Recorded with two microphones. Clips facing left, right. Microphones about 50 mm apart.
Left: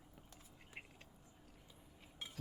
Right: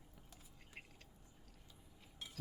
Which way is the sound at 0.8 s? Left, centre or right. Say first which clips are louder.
Left 2 dB; centre.